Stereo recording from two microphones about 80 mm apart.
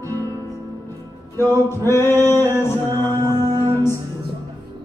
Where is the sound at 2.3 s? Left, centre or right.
Right.